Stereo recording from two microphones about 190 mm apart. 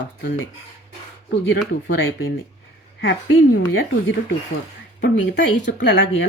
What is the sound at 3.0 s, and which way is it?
Speech, 80° left.